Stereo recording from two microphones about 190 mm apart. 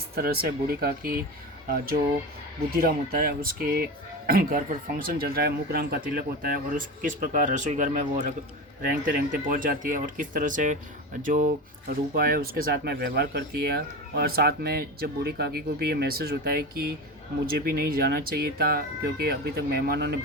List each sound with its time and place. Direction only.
0.2 s speech: 55° right (ahead or behind)